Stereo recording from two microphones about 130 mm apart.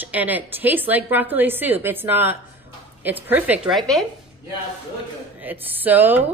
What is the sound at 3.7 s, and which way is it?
Speech, centre (ahead or behind).